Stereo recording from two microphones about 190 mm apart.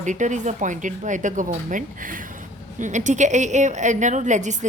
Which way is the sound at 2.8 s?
40° right (ahead or behind).